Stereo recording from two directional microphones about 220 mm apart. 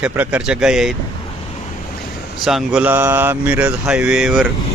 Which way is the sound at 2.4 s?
Centre (ahead or behind).